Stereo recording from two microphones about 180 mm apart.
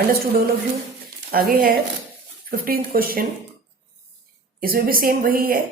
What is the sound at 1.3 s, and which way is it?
A woman's voice, 55° right (ahead or behind).